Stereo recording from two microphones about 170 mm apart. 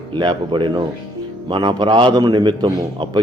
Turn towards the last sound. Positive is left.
turn(degrees=-25)  # may be behind; listen again after turning